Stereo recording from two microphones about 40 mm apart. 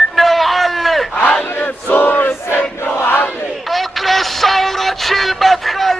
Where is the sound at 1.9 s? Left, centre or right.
Left.